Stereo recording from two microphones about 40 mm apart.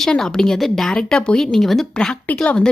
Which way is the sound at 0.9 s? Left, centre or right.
Left.